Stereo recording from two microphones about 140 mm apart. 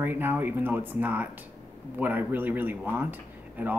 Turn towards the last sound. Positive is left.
turn(degrees=-15)  # may be behind; listen again after turning